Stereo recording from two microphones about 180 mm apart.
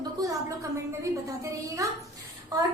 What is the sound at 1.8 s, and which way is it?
Speech, 20° right (ahead or behind).